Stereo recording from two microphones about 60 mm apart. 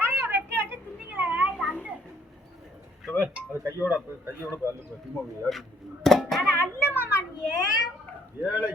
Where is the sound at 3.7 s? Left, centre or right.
Right.